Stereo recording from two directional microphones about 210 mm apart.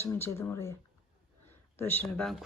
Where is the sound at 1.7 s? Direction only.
10° left (ahead or behind).